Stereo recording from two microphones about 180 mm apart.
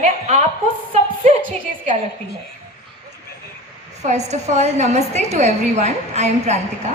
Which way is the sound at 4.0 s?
40° right (ahead or behind).